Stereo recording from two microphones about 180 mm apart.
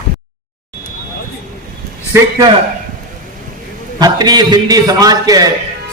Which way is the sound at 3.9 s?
20° right (ahead or behind).